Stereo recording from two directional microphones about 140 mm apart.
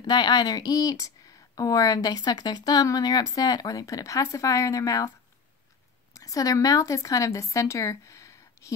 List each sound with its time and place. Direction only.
0.0 s speech: 30° left (ahead or behind)
6.1 s speech: 25° left (ahead or behind)